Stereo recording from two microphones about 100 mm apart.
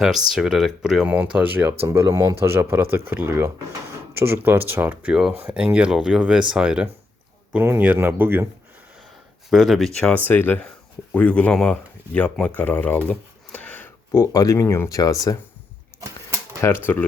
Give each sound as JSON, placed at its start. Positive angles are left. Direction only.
{"t": 0.3, "sound": "speech", "side_deg": -5}
{"t": 1.8, "sound": "speech", "side_deg": -30}
{"t": 7.5, "sound": "speech", "side_deg": -20}
{"t": 9.5, "sound": "speech", "side_deg": 0}
{"t": 10.2, "sound": "speech", "side_deg": 20}
{"t": 16.0, "sound": "typewriter", "side_deg": -30}
{"t": 16.6, "sound": "speech", "side_deg": 25}